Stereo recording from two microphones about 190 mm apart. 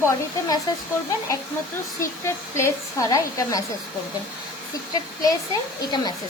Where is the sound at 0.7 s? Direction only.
20° left (ahead or behind).